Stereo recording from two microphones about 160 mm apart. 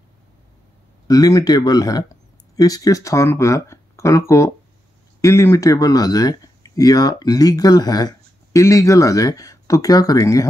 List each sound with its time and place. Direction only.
1.0 s speech: 25° left (ahead or behind)